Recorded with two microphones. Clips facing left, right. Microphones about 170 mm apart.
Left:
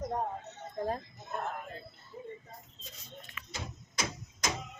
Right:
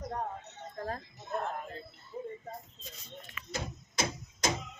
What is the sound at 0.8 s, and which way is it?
Music, 20° left (ahead or behind).